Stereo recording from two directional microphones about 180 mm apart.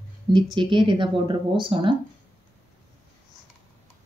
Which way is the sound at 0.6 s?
25° right (ahead or behind).